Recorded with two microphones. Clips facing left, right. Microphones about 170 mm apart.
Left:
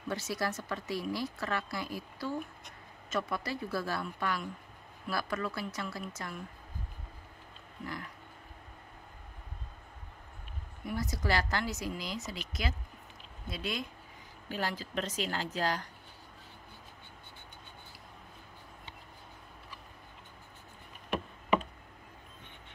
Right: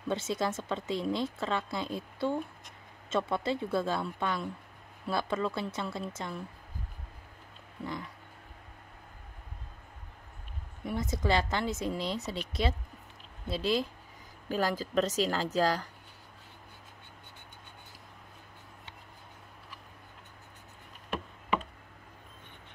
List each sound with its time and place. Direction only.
0.1 s a woman's voice: 20° right (ahead or behind)
10.9 s a woman's voice: 25° right (ahead or behind)
14.5 s a woman's voice: 40° right (ahead or behind)